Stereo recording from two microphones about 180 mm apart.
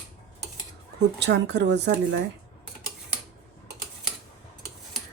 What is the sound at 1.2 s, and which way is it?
Speech, 70° right (ahead or behind).